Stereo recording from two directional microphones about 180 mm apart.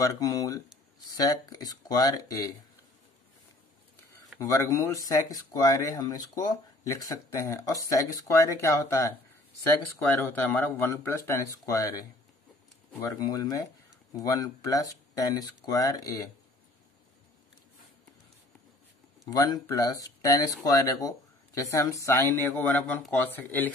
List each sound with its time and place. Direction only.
0.0 s speech: 20° left (ahead or behind)
4.4 s speech: 15° left (ahead or behind)
10.5 s speech: 10° left (ahead or behind)
19.2 s speech: 20° left (ahead or behind)